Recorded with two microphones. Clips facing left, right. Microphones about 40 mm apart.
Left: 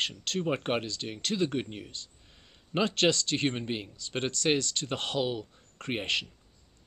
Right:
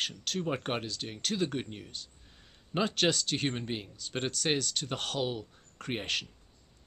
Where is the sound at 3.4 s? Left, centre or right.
Centre.